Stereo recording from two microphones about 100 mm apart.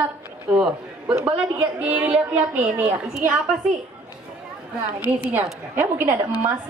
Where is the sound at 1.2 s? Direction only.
15° right (ahead or behind).